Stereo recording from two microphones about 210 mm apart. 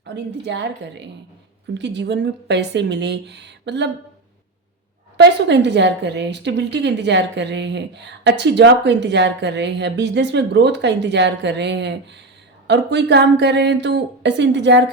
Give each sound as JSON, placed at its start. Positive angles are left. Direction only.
{"t": 0.0, "sound": "speech", "side_deg": -55}
{"t": 5.1, "sound": "speech", "side_deg": -55}